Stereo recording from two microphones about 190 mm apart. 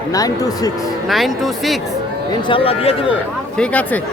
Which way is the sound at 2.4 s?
30° left (ahead or behind).